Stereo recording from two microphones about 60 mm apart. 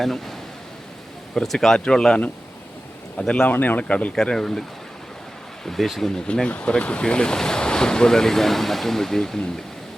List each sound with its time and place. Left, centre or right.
0.0 s speech: centre
3.5 s speech: left
4.1 s speech: centre
5.6 s speech: centre